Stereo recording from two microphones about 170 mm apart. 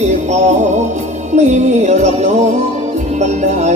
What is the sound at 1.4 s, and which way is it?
Music, 45° right (ahead or behind).